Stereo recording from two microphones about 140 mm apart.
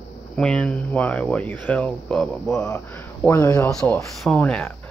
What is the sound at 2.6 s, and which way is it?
Speech, 15° left (ahead or behind).